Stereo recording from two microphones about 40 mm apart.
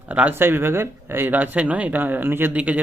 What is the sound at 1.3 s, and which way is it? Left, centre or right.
Speech, right.